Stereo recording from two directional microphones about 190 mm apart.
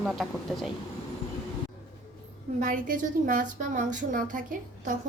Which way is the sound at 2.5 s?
40° right (ahead or behind).